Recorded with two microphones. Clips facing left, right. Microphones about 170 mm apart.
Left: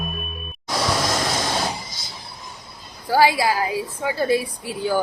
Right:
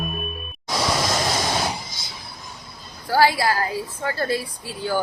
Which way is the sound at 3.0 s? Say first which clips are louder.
Left 1 dB; 15° left (ahead or behind).